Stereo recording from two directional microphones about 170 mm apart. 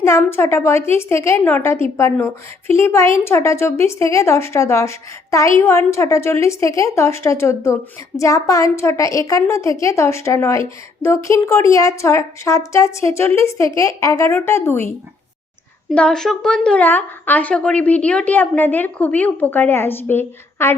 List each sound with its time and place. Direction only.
0.0 s a woman's voice: 15° left (ahead or behind)
15.9 s a woman's voice: 5° left (ahead or behind)